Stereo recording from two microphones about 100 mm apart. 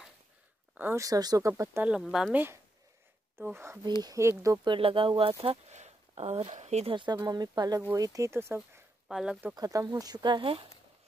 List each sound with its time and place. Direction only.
0.9 s speech: 35° right (ahead or behind)
1.8 s speech: 10° right (ahead or behind)
2.0 s speech: 5° left (ahead or behind)
2.3 s speech: 20° right (ahead or behind)
4.0 s speech: 35° right (ahead or behind)
4.6 s speech: 65° right (ahead or behind)
5.4 s speech: 85° right
7.2 s speech: 40° right (ahead or behind)
9.1 s speech: 5° right (ahead or behind)
9.6 s speech: 35° right (ahead or behind); by 10.5 s 50° right (ahead or behind)